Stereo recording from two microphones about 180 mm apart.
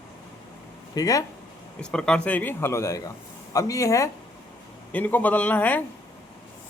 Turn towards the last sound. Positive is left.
turn(degrees=10)  # may be behind; listen again after turning